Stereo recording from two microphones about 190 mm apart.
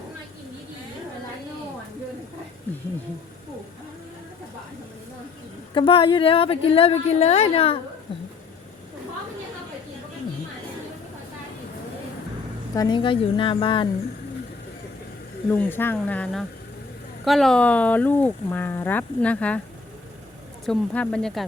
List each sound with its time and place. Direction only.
5.7 s a woman's voice: 25° left (ahead or behind)
12.7 s a woman's voice: 20° left (ahead or behind)
15.5 s speech: 10° left (ahead or behind)
20.7 s speech: 5° left (ahead or behind)